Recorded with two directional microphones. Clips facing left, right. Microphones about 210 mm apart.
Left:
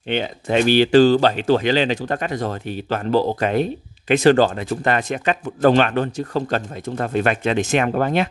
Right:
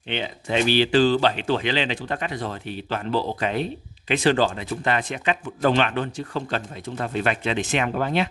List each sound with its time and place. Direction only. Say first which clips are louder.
0.1 s speech: left 5 dB; 45° left (ahead or behind)